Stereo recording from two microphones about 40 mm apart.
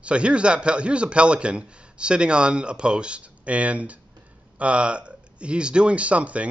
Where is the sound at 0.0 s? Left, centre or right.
Right.